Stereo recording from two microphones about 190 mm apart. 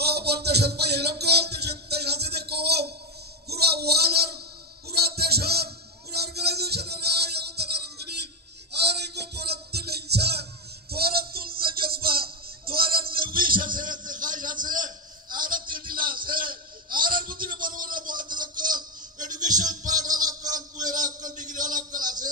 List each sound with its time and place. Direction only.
0.0 s music: 60° right (ahead or behind)
3.4 s a sound: 55° right (ahead or behind)
4.8 s music: 55° right (ahead or behind)